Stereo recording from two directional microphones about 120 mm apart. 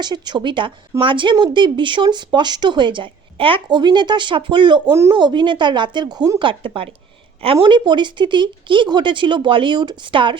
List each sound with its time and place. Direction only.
0.0 s a woman's voice: 35° right (ahead or behind)
4.9 s a woman's voice: 25° right (ahead or behind)
5.1 s a woman's voice: 40° right (ahead or behind)
6.1 s a woman's voice: 25° right (ahead or behind)
6.4 s a woman's voice: 45° right (ahead or behind)